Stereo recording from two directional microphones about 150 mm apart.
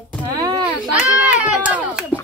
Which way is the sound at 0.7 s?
10° right (ahead or behind).